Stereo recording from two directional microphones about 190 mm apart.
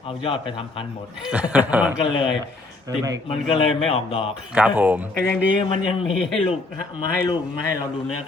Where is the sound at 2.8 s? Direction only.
20° right (ahead or behind).